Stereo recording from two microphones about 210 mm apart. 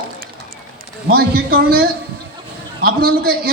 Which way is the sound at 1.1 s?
45° right (ahead or behind).